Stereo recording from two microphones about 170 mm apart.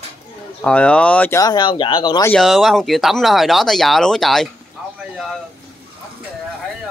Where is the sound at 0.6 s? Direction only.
5° left (ahead or behind); by 2.3 s 25° left (ahead or behind).